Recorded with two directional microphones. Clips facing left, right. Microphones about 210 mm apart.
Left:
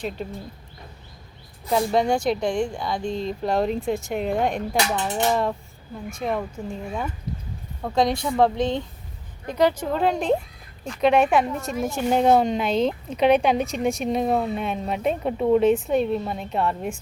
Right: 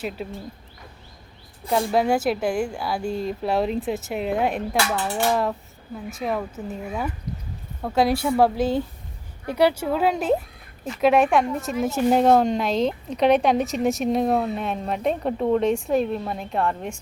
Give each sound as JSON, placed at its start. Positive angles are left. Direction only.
{"t": 0.0, "sound": "a woman's voice", "side_deg": -5}
{"t": 1.7, "sound": "a woman's voice", "side_deg": -5}
{"t": 4.9, "sound": "dishes", "side_deg": 20}
{"t": 5.3, "sound": "a woman's voice", "side_deg": 0}